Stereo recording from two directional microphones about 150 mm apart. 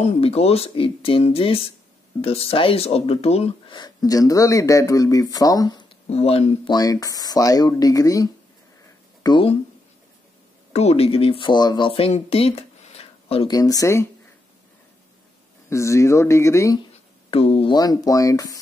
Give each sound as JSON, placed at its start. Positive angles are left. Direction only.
{"t": 0.0, "sound": "speech", "side_deg": 40}
{"t": 6.0, "sound": "speech", "side_deg": 40}
{"t": 6.7, "sound": "speech", "side_deg": 25}
{"t": 10.7, "sound": "speech", "side_deg": 45}
{"t": 12.1, "sound": "a sound", "side_deg": 40}
{"t": 13.5, "sound": "speech", "side_deg": 25}
{"t": 15.7, "sound": "speech", "side_deg": 20}
{"t": 17.3, "sound": "speech", "side_deg": 40}
{"t": 17.7, "sound": "speech", "side_deg": 25}